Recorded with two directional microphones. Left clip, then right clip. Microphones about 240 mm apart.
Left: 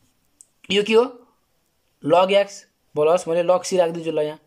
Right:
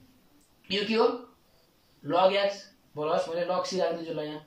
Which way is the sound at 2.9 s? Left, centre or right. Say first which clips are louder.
Left 10 dB; left.